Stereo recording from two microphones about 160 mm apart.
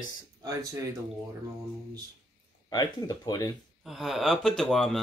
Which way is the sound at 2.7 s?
25° left (ahead or behind).